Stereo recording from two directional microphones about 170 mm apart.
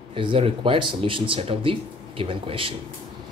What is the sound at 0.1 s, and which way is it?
Speech, 30° right (ahead or behind).